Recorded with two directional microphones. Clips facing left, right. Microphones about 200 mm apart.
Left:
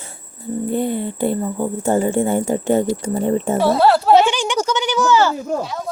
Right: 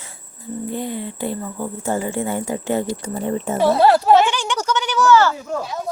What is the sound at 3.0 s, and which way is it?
Speech, 30° left (ahead or behind).